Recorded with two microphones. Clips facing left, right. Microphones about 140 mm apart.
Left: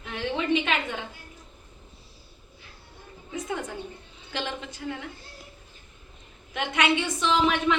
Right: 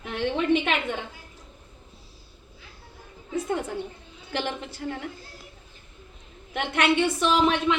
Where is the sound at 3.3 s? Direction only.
60° right (ahead or behind).